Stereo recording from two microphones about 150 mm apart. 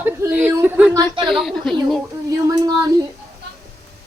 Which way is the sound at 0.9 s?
30° right (ahead or behind).